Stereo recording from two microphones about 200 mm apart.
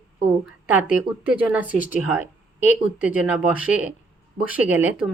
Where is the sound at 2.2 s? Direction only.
35° left (ahead or behind).